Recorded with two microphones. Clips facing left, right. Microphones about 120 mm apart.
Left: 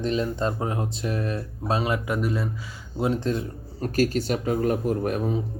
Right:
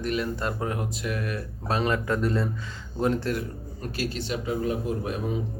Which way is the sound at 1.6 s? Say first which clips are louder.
Even; 15° left (ahead or behind).